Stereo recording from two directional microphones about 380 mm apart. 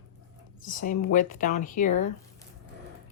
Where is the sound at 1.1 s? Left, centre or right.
Centre.